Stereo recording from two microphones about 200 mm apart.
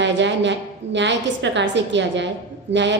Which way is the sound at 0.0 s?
60° right (ahead or behind).